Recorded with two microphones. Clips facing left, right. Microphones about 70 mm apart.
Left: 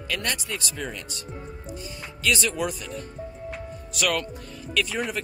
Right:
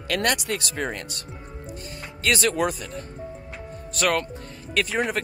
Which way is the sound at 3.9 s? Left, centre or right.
Right.